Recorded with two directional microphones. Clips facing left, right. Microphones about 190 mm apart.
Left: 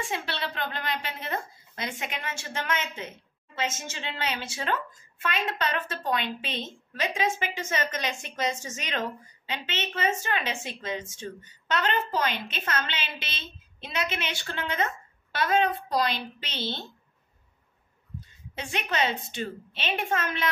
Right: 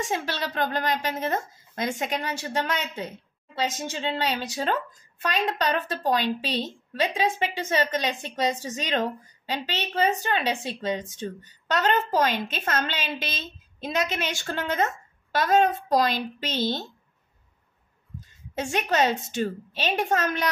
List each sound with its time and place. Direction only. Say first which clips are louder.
0.0 s a woman's voice: right 4 dB; 40° right (ahead or behind)
18.5 s a woman's voice: right 6 dB; 45° right (ahead or behind)